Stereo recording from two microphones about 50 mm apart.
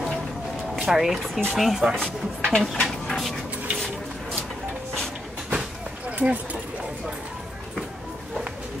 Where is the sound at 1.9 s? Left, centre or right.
Centre.